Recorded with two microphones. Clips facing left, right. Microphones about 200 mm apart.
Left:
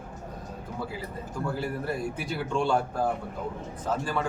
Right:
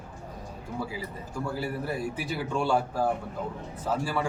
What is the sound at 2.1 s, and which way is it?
Speech, 5° right (ahead or behind).